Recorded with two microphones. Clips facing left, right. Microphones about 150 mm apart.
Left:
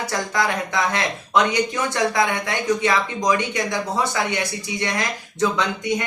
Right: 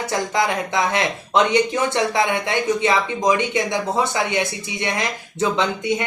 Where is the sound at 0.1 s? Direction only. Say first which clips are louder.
Right 3 dB; 20° right (ahead or behind).